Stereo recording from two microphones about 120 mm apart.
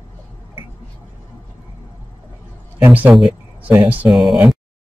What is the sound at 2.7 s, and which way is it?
Speech, 15° right (ahead or behind).